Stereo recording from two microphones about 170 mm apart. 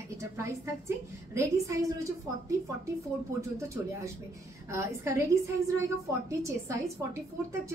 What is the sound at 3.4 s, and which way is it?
A woman's voice, 15° right (ahead or behind).